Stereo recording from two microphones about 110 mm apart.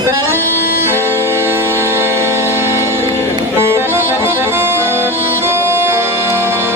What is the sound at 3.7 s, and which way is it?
Music, 20° right (ahead or behind).